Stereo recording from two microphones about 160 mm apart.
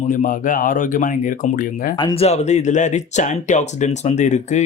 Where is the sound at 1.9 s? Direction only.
35° left (ahead or behind).